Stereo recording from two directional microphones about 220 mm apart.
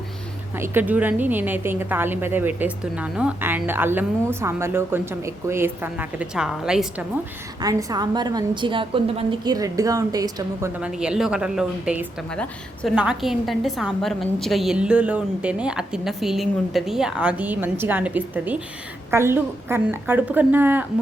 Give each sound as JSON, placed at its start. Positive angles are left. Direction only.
{"t": 0.5, "sound": "a woman's voice", "side_deg": -10}
{"t": 7.6, "sound": "a woman's voice", "side_deg": -15}
{"t": 10.8, "sound": "a woman's voice", "side_deg": -5}